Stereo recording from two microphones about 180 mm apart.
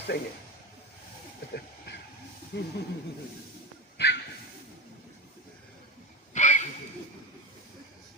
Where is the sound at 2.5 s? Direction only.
65° left (ahead or behind).